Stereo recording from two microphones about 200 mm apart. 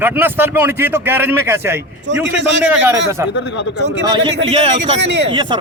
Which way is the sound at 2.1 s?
65° right (ahead or behind).